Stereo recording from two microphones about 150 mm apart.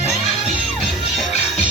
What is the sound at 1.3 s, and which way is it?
Music, 50° left (ahead or behind).